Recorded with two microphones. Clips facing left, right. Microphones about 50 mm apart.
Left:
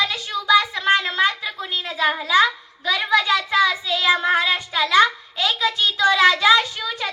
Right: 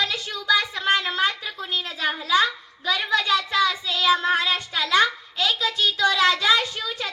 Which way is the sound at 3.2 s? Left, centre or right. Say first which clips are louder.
Left 3 dB; centre.